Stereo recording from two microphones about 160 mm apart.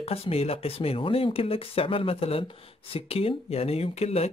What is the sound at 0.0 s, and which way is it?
Speech, 40° left (ahead or behind).